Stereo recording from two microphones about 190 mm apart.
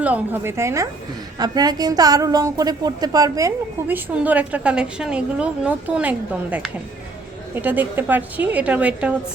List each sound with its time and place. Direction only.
0.0 s a woman's voice: 10° right (ahead or behind)